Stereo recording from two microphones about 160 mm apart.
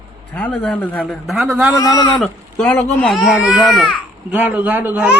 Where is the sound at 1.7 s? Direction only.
20° left (ahead or behind).